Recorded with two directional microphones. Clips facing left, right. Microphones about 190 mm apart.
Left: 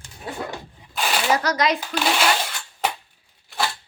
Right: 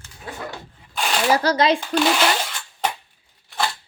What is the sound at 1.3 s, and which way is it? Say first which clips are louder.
Speech: right 4 dB; 30° right (ahead or behind).